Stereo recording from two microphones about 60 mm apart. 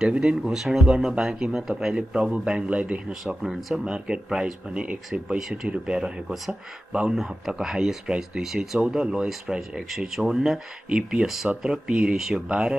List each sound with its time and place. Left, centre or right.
0.0 s a man's voice: centre
3.4 s speech: centre
3.8 s a man's voice: centre
5.9 s speech: centre
6.9 s speech: centre
9.3 s speech: centre